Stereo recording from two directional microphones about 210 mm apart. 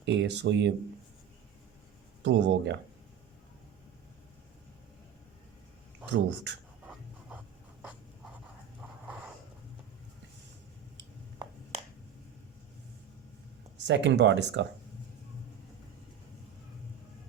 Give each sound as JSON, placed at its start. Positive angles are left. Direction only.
{"t": 0.0, "sound": "speech", "side_deg": -55}
{"t": 2.2, "sound": "speech", "side_deg": -60}
{"t": 6.1, "sound": "speech", "side_deg": -60}
{"t": 7.8, "sound": "writing", "side_deg": -5}
{"t": 13.7, "sound": "speech", "side_deg": -55}